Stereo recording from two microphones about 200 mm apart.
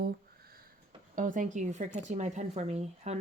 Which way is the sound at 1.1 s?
40° right (ahead or behind).